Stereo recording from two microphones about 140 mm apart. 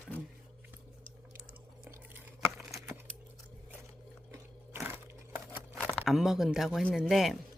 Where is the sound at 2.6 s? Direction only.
Centre (ahead or behind).